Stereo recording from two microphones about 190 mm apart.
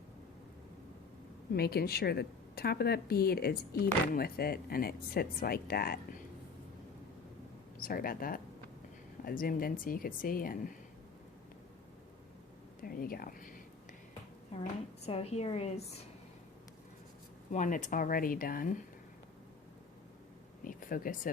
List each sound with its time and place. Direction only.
1.5 s speech: 55° left (ahead or behind)
7.8 s speech: 50° left (ahead or behind)
12.8 s speech: 50° left (ahead or behind)
14.5 s a woman's voice: 30° left (ahead or behind)
17.5 s speech: 40° left (ahead or behind)
20.7 s a sound: 45° left (ahead or behind)